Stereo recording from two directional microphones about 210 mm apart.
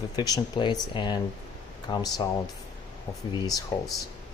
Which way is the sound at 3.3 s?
20° left (ahead or behind).